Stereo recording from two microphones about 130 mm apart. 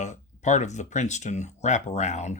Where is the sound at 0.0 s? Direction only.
65° left (ahead or behind).